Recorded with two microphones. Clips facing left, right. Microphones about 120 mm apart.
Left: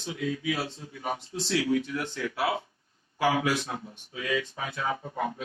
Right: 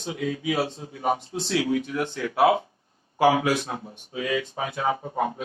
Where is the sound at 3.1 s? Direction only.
40° right (ahead or behind).